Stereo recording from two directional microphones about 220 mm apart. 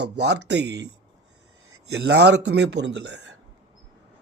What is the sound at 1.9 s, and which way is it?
A man's voice, 50° right (ahead or behind).